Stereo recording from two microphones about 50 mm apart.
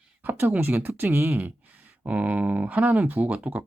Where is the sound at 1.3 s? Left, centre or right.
Right.